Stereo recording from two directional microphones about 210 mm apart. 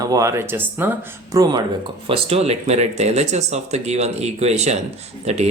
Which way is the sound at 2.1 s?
30° right (ahead or behind).